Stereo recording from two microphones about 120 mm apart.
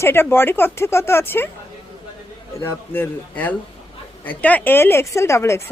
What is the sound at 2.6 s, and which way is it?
A man's voice, 20° left (ahead or behind).